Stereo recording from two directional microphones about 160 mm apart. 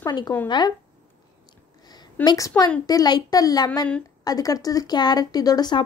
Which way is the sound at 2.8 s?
25° left (ahead or behind).